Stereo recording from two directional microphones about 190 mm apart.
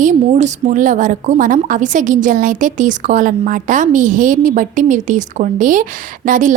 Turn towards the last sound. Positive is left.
turn(degrees=-45)  # may be behind; listen again after turning